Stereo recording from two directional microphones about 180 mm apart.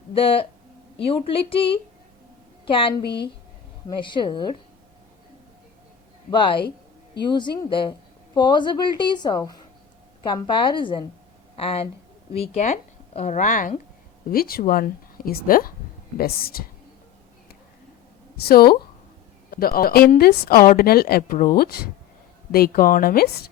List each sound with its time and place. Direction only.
0.1 s speech: 30° left (ahead or behind)
3.8 s a woman's voice: 25° left (ahead or behind)
6.3 s a woman's voice: 25° left (ahead or behind)
6.6 s a sound: 65° left (ahead or behind)
7.2 s a woman's voice: 25° left (ahead or behind); by 16.6 s 55° left (ahead or behind)
18.3 s speech: 60° left (ahead or behind)